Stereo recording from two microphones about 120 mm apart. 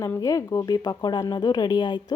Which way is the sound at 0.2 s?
30° left (ahead or behind).